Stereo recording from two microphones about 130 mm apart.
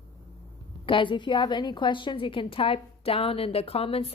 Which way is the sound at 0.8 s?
40° left (ahead or behind).